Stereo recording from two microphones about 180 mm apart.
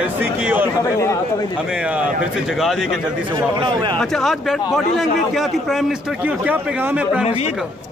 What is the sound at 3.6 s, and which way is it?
Speech, 25° right (ahead or behind).